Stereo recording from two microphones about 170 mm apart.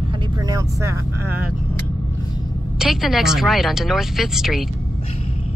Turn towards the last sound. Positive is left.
turn(degrees=0)  # may be behind; listen again after turning